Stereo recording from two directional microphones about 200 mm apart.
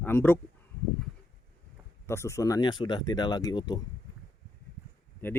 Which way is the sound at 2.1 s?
15° left (ahead or behind).